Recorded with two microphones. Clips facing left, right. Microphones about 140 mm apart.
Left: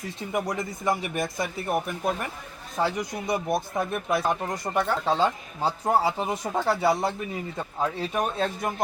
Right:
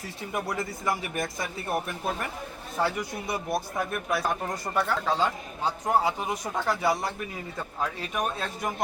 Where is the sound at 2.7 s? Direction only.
20° left (ahead or behind).